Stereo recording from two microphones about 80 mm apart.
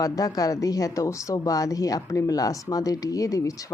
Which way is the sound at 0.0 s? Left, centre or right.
Left.